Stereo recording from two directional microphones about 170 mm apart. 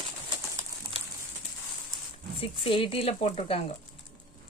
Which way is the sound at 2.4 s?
30° left (ahead or behind).